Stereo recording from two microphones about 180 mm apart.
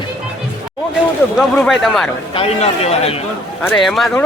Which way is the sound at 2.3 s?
35° left (ahead or behind).